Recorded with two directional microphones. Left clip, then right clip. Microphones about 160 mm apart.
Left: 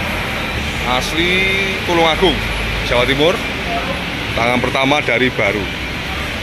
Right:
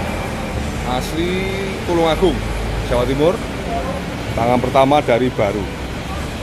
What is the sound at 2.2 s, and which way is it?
Speech, 5° right (ahead or behind).